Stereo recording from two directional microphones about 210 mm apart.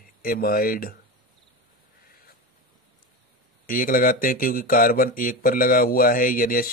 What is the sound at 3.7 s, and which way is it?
Speech, 40° left (ahead or behind).